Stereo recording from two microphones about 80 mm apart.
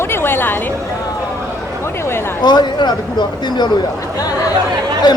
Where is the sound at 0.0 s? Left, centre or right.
Left.